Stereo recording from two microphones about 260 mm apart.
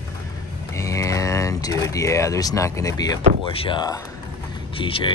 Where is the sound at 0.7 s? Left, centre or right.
Centre.